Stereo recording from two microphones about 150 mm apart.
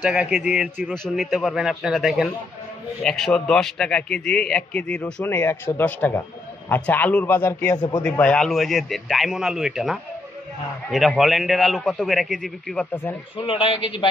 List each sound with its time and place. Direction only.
0.0 s a man's voice: 5° right (ahead or behind); by 13.1 s 10° left (ahead or behind)
13.5 s a man's voice: 40° left (ahead or behind)